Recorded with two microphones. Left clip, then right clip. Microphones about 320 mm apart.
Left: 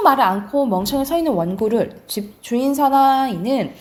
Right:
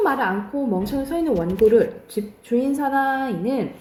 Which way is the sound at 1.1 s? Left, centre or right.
Centre.